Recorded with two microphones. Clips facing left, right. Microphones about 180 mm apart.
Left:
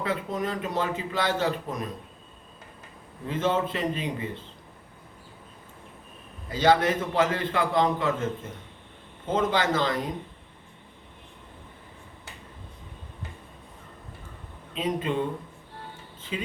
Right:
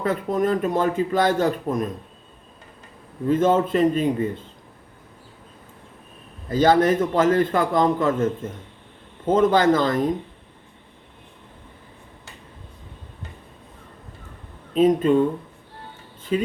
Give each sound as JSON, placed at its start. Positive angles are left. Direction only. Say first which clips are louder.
{"t": 0.0, "sound": "speech", "louder": "right 7 dB", "side_deg": -50}
{"t": 3.2, "sound": "speech", "louder": "right 8 dB", "side_deg": -50}
{"t": 6.5, "sound": "speech", "louder": "right 5 dB", "side_deg": -45}
{"t": 14.8, "sound": "speech", "louder": "right 11 dB", "side_deg": -45}